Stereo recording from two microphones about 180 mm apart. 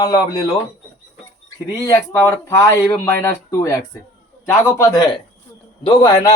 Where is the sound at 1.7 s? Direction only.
20° left (ahead or behind).